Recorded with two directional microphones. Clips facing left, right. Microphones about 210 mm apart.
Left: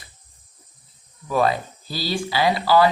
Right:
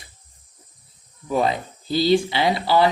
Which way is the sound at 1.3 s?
20° right (ahead or behind).